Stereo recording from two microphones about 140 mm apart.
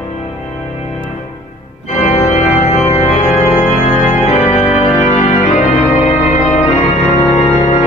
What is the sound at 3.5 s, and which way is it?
Music, 60° left (ahead or behind).